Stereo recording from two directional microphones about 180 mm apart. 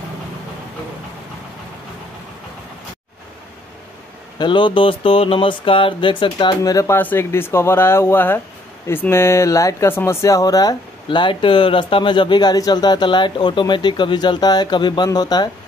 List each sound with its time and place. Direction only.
4.4 s speech: 25° left (ahead or behind)